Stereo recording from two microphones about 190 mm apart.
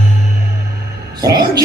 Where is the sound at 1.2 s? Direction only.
20° right (ahead or behind).